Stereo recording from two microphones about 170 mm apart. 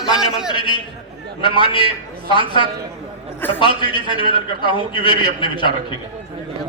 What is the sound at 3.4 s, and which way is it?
Speech, 10° left (ahead or behind).